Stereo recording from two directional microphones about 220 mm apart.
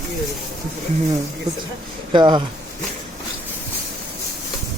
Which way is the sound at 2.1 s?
20° right (ahead or behind).